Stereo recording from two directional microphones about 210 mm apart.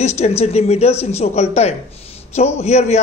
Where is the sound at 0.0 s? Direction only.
30° left (ahead or behind).